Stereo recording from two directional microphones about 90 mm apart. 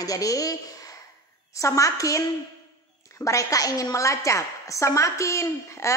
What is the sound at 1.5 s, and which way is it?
A woman's voice, 35° left (ahead or behind).